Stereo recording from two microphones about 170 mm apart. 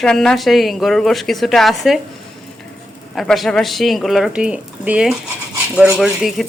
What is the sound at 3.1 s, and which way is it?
Speech, centre (ahead or behind).